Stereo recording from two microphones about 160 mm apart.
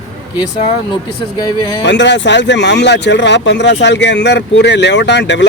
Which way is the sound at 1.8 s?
90° left.